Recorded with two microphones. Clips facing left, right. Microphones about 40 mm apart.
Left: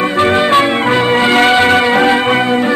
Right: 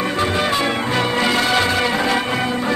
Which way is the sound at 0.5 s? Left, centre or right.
Left.